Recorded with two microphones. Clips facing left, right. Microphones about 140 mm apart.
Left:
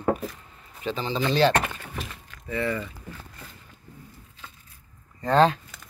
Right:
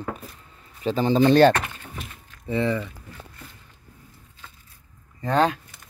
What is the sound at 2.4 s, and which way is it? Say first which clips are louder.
Speech: right 4 dB; 20° right (ahead or behind).